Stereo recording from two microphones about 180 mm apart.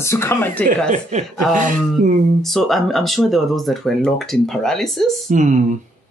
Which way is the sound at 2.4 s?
Centre (ahead or behind).